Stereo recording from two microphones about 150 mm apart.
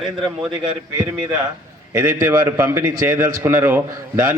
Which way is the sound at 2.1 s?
25° right (ahead or behind).